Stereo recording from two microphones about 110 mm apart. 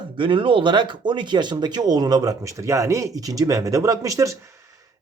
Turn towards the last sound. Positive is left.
turn(degrees=-30)  # may be behind; listen again after turning